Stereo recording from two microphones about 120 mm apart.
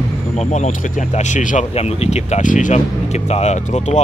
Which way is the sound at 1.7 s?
55° left (ahead or behind).